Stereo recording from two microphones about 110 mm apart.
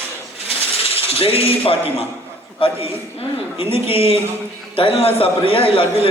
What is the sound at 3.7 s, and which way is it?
A man's voice, 60° left (ahead or behind).